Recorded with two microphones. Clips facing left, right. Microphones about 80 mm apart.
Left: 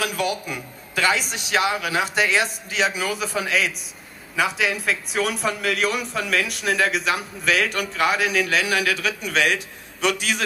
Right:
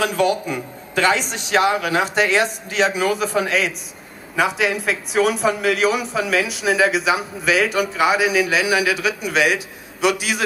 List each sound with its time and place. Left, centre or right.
0.0 s speech: right
1.8 s a man's voice: centre